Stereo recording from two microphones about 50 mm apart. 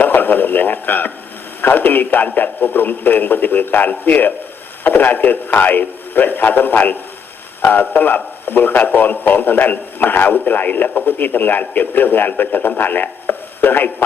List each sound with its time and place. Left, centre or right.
0.0 s radio: left
1.6 s speech: left